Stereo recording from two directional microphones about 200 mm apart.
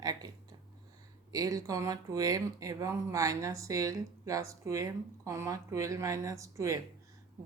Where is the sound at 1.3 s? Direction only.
20° right (ahead or behind).